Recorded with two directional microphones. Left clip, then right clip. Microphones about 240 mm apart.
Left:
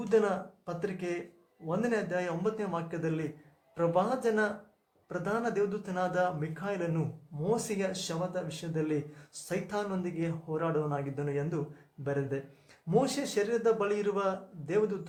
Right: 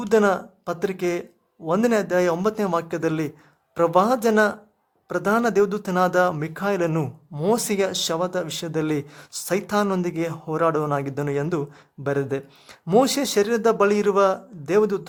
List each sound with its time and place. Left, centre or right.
0.1 s speech: right